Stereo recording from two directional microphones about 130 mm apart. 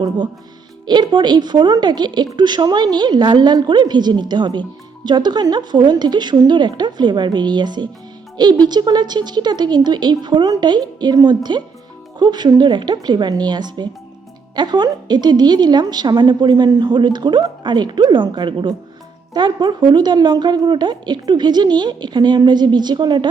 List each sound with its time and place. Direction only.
0.9 s a woman's voice: 35° right (ahead or behind)